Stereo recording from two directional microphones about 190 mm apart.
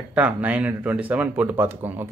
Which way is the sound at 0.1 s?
10° right (ahead or behind).